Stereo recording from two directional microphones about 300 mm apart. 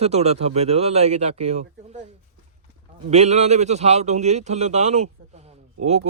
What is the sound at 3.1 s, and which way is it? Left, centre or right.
Speech, right.